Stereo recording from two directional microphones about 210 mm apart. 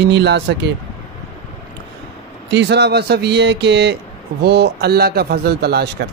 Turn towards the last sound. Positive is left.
turn(degrees=-50)  # may be behind; listen again after turning